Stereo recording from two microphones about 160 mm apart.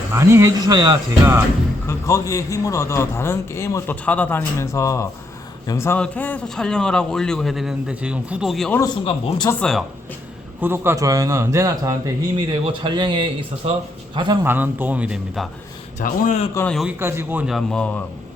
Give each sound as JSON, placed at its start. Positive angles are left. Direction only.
{"t": 0.1, "sound": "speech", "side_deg": -15}
{"t": 1.9, "sound": "a man's voice", "side_deg": 20}
{"t": 9.0, "sound": "speech", "side_deg": 35}
{"t": 9.5, "sound": "a man's voice", "side_deg": 5}
{"t": 10.6, "sound": "a man's voice", "side_deg": -15}
{"t": 14.4, "sound": "speech", "side_deg": -10}
{"t": 16.0, "sound": "a man's voice", "side_deg": 50}
{"t": 17.0, "sound": "speech", "side_deg": -15}
{"t": 17.4, "sound": "a man's voice", "side_deg": 0}